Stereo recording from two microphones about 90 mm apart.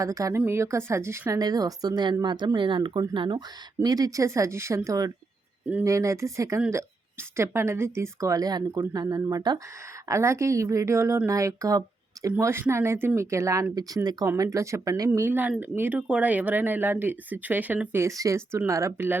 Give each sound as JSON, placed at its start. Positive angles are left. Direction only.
{"t": 0.0, "sound": "a woman's voice", "side_deg": -40}
{"t": 1.3, "sound": "speech", "side_deg": -45}
{"t": 3.8, "sound": "a woman's voice", "side_deg": -45}
{"t": 10.1, "sound": "a woman's voice", "side_deg": -30}
{"t": 13.7, "sound": "speech", "side_deg": -45}
{"t": 14.3, "sound": "a woman's voice", "side_deg": -35}
{"t": 15.2, "sound": "speech", "side_deg": -20}
{"t": 18.0, "sound": "a woman's voice", "side_deg": -35}